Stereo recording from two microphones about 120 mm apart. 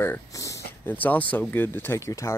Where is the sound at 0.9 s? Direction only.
15° left (ahead or behind).